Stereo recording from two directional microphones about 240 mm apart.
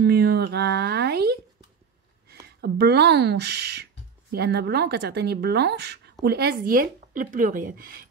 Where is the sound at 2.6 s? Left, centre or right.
Right.